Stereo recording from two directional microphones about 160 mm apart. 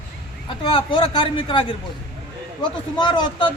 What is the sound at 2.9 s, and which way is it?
Speech, 30° left (ahead or behind).